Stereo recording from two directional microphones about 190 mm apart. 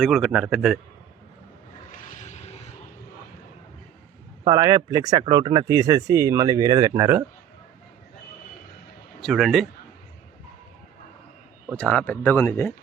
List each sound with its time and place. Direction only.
0.0 s a man's voice: centre (ahead or behind)
2.0 s vehicle: 40° left (ahead or behind)
4.4 s speech: 15° right (ahead or behind)
9.2 s a man's voice: centre (ahead or behind)
11.8 s speech: 5° left (ahead or behind)